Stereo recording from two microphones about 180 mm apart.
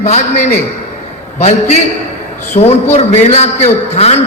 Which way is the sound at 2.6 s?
35° left (ahead or behind).